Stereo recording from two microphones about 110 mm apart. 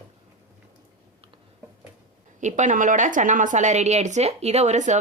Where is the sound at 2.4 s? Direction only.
90° right.